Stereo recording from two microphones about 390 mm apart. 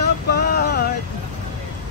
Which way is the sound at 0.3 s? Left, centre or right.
Left.